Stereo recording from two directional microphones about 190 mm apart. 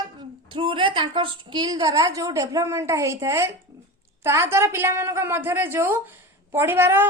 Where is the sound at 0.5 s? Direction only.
25° right (ahead or behind).